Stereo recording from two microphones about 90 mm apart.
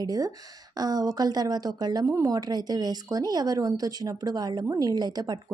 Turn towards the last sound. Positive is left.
turn(degrees=-45)  # may be behind; listen again after turning